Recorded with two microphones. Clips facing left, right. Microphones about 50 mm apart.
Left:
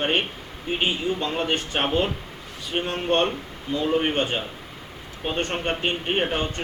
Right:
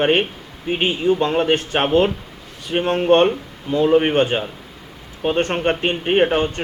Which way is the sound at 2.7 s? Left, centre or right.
Right.